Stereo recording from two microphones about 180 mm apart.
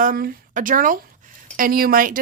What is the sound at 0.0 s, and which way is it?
Speech, 50° right (ahead or behind).